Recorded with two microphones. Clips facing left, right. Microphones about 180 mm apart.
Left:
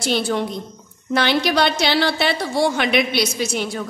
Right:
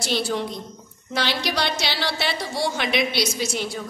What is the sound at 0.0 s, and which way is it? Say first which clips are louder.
A woman's voice: left 4 dB; 55° left (ahead or behind).